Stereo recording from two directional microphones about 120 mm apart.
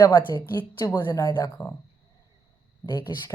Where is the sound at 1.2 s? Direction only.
35° left (ahead or behind).